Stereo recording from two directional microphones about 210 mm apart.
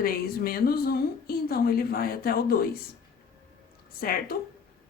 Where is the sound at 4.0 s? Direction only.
45° left (ahead or behind).